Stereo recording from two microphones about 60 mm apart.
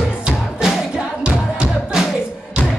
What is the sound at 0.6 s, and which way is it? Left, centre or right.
Music, centre.